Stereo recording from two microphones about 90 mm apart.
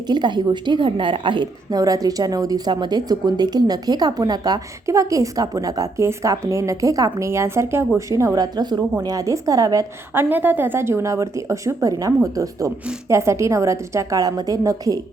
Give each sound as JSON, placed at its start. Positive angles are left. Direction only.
{"t": 0.1, "sound": "a woman's voice", "side_deg": -55}
{"t": 1.7, "sound": "speech", "side_deg": -40}
{"t": 8.4, "sound": "speech", "side_deg": -50}
{"t": 10.2, "sound": "speech", "side_deg": -20}